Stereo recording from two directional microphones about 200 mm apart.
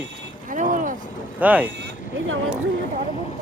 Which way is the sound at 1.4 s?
10° right (ahead or behind).